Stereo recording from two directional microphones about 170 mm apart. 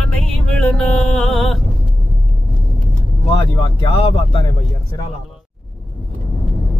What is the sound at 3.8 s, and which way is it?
Speech, 30° left (ahead or behind).